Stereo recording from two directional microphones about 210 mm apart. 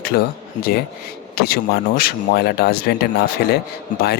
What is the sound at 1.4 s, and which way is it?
A man's voice, 45° left (ahead or behind).